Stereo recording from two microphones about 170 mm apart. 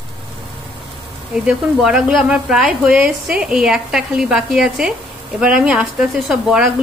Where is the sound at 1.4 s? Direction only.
5° right (ahead or behind).